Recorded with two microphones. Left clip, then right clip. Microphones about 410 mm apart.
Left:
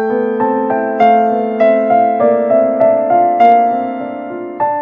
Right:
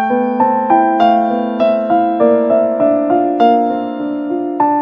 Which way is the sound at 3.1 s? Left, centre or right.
Centre.